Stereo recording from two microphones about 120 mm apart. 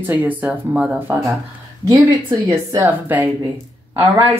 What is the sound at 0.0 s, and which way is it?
A woman's voice, 15° right (ahead or behind).